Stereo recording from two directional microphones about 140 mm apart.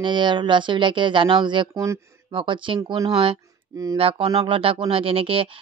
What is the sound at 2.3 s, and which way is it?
Speech, 35° right (ahead or behind).